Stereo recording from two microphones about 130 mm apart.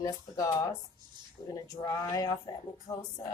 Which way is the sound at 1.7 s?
30° left (ahead or behind).